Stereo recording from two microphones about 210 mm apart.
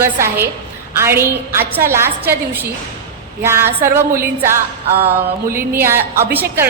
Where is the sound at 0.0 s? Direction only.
10° right (ahead or behind).